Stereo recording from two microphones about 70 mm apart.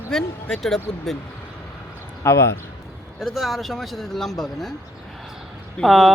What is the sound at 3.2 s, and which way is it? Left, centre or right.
Speech, centre.